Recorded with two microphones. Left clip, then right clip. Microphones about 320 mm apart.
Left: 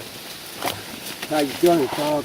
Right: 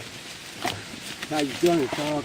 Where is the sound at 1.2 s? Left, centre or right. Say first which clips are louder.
Left 5 dB; centre.